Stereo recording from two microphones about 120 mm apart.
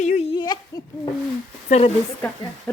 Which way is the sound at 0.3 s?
35° left (ahead or behind).